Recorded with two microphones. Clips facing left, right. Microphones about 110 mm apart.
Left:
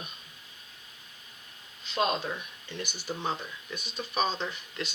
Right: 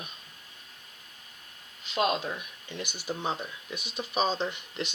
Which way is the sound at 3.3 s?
15° right (ahead or behind).